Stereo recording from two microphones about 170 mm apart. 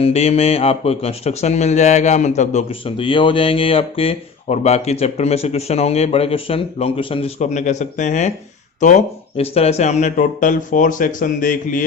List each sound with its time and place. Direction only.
0.0 s speech: 35° left (ahead or behind)